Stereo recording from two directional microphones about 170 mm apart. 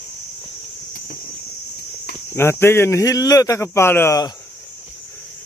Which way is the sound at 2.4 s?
15° left (ahead or behind).